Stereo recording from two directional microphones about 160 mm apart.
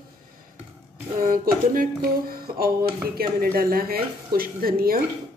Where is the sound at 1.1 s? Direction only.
60° right (ahead or behind).